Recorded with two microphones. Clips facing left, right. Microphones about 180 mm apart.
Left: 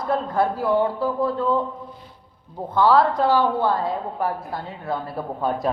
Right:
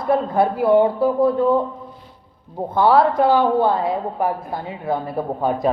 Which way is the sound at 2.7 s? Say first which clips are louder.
Right 2 dB; 15° right (ahead or behind).